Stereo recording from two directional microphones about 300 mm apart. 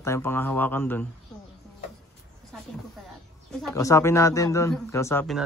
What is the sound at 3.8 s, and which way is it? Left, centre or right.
A man's voice, centre.